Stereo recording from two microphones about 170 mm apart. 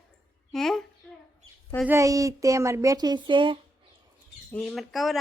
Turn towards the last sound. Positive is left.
turn(degrees=0)  # may be behind; listen again after turning